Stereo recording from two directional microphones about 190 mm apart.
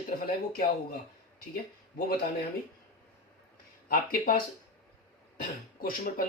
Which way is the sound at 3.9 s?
50° left (ahead or behind).